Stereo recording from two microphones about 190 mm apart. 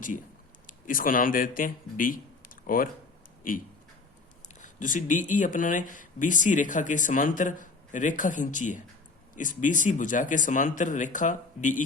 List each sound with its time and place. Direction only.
0.9 s speech: 45° left (ahead or behind)